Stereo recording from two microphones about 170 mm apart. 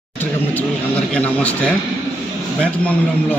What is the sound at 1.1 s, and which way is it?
Speech, 10° left (ahead or behind).